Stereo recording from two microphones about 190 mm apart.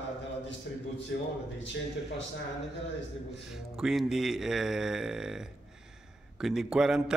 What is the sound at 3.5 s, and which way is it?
Speech, centre (ahead or behind).